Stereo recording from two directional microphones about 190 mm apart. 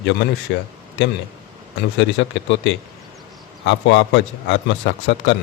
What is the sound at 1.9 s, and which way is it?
A man's voice, 75° left (ahead or behind).